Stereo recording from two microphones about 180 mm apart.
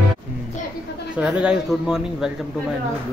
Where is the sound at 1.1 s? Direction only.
5° right (ahead or behind).